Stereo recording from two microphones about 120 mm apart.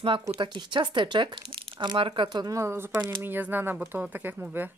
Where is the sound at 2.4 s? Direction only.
25° right (ahead or behind).